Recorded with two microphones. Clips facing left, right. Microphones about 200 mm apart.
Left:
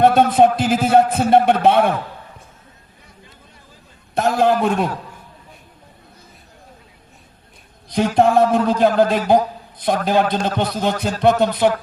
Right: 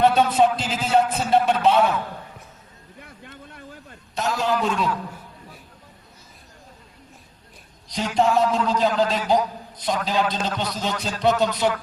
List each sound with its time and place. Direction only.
0.0 s a sound: 50° left (ahead or behind)
3.0 s vehicle: 65° right (ahead or behind)
4.1 s a man's voice: 55° left (ahead or behind)
7.9 s a man's voice: 55° left (ahead or behind)